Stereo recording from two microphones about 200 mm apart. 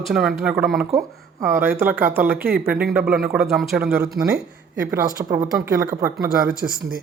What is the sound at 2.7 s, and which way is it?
Speech, 5° right (ahead or behind).